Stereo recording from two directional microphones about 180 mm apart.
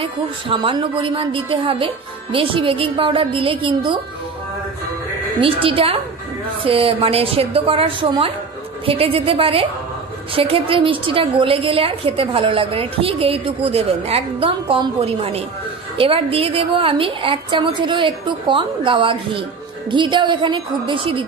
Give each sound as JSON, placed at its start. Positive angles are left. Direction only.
{"t": 0.0, "sound": "a woman's voice", "side_deg": -30}
{"t": 5.4, "sound": "a woman's voice", "side_deg": -30}